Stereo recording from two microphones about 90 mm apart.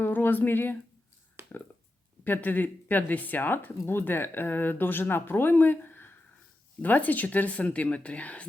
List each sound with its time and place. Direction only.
0.0 s speech: 20° left (ahead or behind)
2.2 s speech: 20° left (ahead or behind)